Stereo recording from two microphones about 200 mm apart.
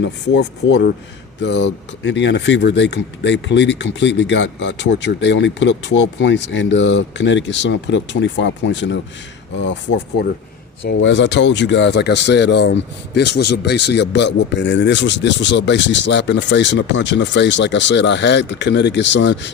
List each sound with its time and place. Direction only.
0.3 s speech: 60° left (ahead or behind)